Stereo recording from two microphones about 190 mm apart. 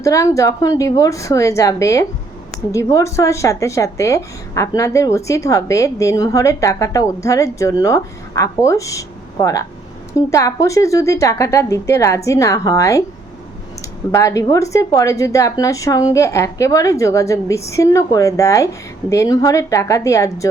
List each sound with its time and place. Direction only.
0.0 s speech: 15° left (ahead or behind)
14.1 s speech: 15° left (ahead or behind)